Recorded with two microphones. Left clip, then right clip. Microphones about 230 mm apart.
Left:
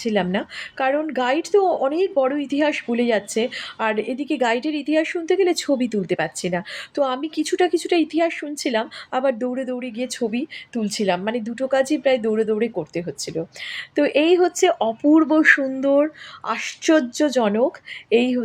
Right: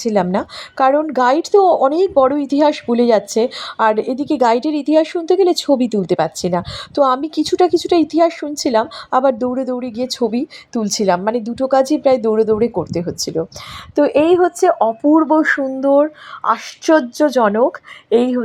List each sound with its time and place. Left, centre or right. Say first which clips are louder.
0.0 s speech: right 6 dB; right
13.9 s speech: right 5 dB; centre
15.4 s speech: even; centre
15.9 s speech: right 6 dB; centre